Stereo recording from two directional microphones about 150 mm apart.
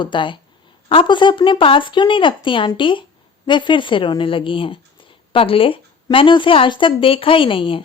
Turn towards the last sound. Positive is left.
turn(degrees=35)  # may be behind; listen again after turning